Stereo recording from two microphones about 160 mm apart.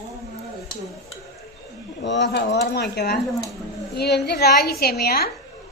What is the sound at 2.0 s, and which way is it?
Speech, 90° left.